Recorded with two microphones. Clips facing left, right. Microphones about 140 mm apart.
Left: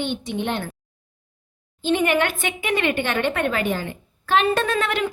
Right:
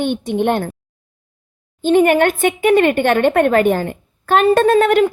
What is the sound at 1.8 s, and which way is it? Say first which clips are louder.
A woman's voice: right 8 dB; 50° right (ahead or behind).